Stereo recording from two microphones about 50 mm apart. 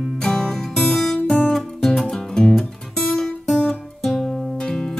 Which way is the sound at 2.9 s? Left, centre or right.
Left.